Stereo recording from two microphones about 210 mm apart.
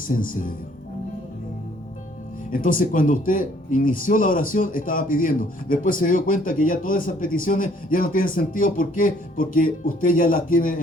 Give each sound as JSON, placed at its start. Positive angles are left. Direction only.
{"t": 0.1, "sound": "speech", "side_deg": 40}
{"t": 2.5, "sound": "speech", "side_deg": 40}